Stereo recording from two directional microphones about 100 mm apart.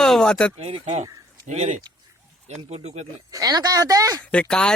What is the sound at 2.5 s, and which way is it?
Speech, 90° right.